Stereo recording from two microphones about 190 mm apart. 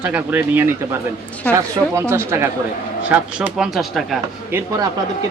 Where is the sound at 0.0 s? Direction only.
10° right (ahead or behind).